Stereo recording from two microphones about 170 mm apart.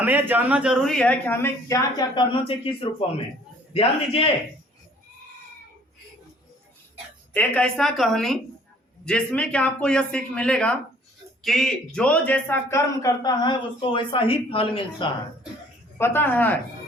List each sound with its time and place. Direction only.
0.0 s a man's voice: 10° right (ahead or behind); by 4.3 s 35° left (ahead or behind)
7.3 s a woman's voice: 5° left (ahead or behind); by 15.1 s 30° left (ahead or behind)
16.0 s speech: 15° left (ahead or behind)